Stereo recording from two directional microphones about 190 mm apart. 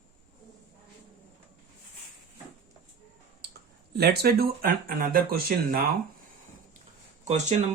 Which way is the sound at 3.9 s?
55° right (ahead or behind).